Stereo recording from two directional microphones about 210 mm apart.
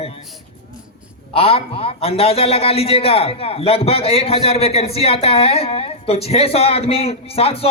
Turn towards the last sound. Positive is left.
turn(degrees=25)  # may be behind; listen again after turning